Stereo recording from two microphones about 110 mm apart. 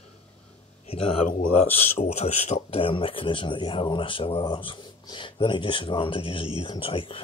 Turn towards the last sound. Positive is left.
turn(degrees=55)  # may be behind; listen again after turning